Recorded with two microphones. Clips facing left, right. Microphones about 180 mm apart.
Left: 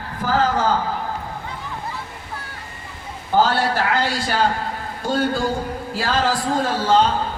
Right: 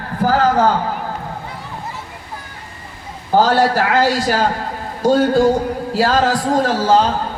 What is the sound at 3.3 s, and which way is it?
A man's voice, 40° right (ahead or behind).